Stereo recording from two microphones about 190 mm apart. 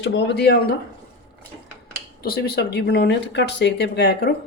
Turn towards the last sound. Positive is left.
turn(degrees=55)  # may be behind; listen again after turning